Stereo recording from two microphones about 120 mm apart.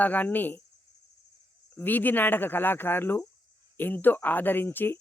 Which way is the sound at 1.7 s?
15° left (ahead or behind).